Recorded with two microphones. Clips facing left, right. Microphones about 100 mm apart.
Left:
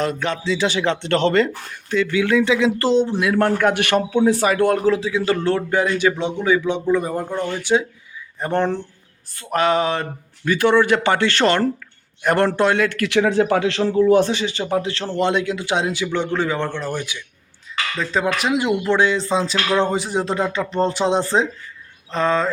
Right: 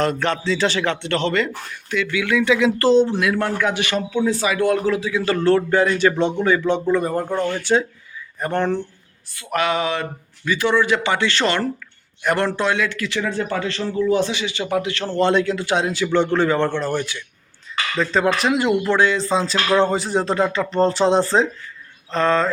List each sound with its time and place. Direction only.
0.0 s speech: 5° left (ahead or behind)
0.9 s speech: 40° left (ahead or behind); by 3.1 s 20° left (ahead or behind)
3.3 s a man's voice: 50° left (ahead or behind)
4.9 s speech: 30° left (ahead or behind); by 7.9 s 10° left (ahead or behind)
8.4 s speech: 25° left (ahead or behind)
9.3 s speech: 40° left (ahead or behind)
10.5 s speech: 50° left (ahead or behind)
13.1 s speech: 85° left
14.1 s speech: 45° left (ahead or behind); by 15.0 s 30° left (ahead or behind)
15.0 s speech: 15° left (ahead or behind)